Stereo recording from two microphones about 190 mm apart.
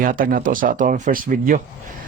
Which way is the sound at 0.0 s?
45° right (ahead or behind).